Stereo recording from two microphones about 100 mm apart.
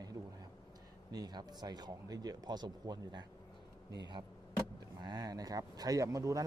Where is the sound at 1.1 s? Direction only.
45° right (ahead or behind).